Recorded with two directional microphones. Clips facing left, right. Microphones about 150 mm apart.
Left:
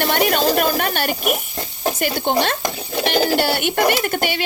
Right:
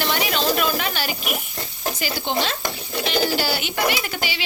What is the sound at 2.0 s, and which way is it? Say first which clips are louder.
Speech: left 5 dB; 55° left (ahead or behind).